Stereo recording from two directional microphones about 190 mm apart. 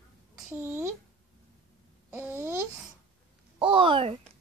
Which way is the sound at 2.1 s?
10° right (ahead or behind).